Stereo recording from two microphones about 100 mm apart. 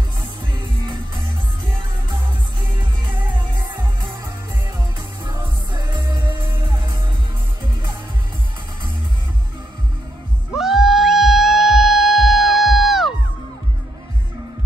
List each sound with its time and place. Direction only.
5.2 s music: 45° right (ahead or behind)
10.5 s music: centre (ahead or behind)